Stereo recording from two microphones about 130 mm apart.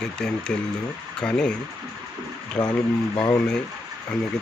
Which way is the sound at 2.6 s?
15° left (ahead or behind).